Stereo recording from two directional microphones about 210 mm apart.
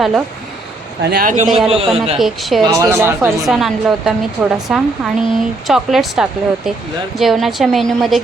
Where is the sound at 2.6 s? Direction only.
15° right (ahead or behind).